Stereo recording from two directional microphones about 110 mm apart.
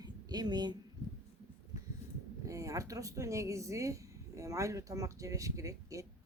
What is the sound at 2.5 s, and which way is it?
Speech, 30° right (ahead or behind).